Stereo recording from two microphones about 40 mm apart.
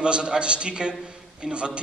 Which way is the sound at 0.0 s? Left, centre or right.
Right.